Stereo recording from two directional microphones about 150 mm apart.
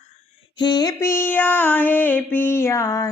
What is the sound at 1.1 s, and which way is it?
Female singing, 15° left (ahead or behind).